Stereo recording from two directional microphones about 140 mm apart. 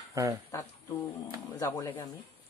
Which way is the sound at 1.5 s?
20° left (ahead or behind).